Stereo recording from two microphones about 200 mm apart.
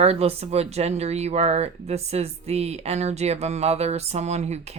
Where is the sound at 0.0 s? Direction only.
30° right (ahead or behind).